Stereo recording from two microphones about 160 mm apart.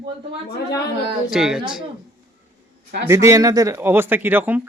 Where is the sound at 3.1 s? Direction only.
20° right (ahead or behind).